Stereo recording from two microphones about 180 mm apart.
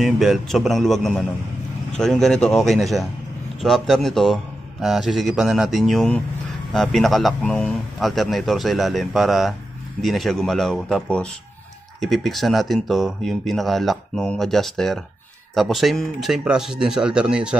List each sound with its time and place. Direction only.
0.0 s speech: centre (ahead or behind)